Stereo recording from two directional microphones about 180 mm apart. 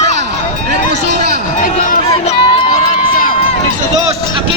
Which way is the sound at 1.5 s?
45° left (ahead or behind).